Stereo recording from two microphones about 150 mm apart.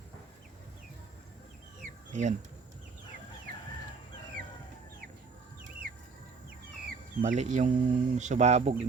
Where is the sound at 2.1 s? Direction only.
55° right (ahead or behind).